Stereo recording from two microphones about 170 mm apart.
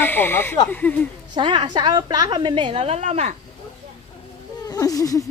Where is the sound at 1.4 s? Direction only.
30° right (ahead or behind).